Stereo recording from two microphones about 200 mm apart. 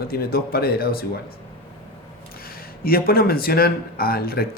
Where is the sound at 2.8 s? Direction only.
50° left (ahead or behind).